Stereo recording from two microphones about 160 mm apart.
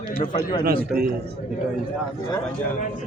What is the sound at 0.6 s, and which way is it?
Speech, 65° right (ahead or behind).